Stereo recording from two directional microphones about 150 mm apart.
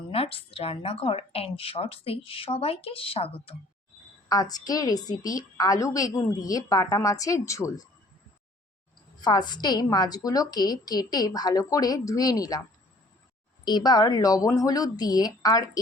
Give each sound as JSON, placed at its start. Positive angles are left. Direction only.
{"t": 0.1, "sound": "speech", "side_deg": 40}
{"t": 4.3, "sound": "a woman's voice", "side_deg": 25}
{"t": 9.2, "sound": "a woman's voice", "side_deg": 30}
{"t": 13.7, "sound": "a woman's voice", "side_deg": 30}